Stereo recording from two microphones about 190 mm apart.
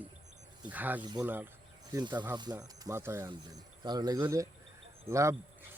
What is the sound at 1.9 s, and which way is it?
Speech, 20° right (ahead or behind).